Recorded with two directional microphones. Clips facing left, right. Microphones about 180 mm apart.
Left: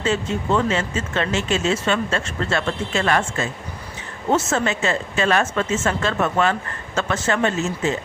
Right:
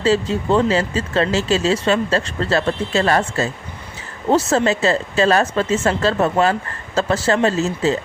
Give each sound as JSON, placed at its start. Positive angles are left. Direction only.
{"t": 0.0, "sound": "speech", "side_deg": -35}